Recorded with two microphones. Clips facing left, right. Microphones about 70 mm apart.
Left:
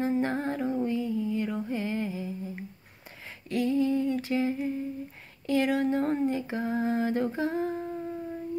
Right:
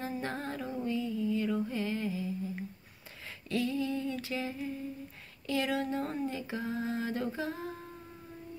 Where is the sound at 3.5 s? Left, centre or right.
Left.